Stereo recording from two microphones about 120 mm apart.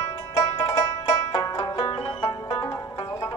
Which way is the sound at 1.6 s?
45° left (ahead or behind).